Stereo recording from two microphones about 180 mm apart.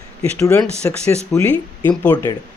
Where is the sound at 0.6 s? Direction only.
5° left (ahead or behind).